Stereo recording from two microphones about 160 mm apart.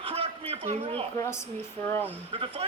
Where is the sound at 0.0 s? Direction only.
35° right (ahead or behind).